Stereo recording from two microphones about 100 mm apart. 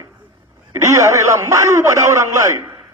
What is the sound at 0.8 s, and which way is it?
A man's voice, 30° right (ahead or behind).